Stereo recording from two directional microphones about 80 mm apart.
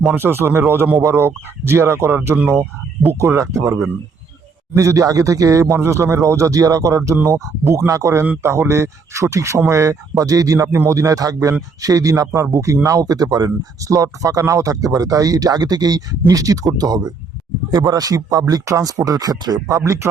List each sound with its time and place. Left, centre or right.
0.2 s speech: right